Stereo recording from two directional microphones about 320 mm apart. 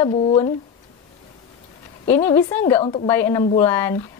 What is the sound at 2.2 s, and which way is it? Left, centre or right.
Speech, centre.